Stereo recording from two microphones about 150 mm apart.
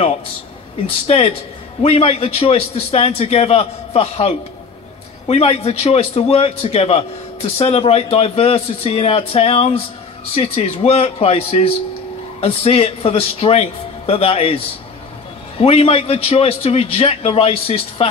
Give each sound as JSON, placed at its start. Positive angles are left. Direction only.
{"t": 1.0, "sound": "a man's voice", "side_deg": 45}
{"t": 15.6, "sound": "a man's voice", "side_deg": 40}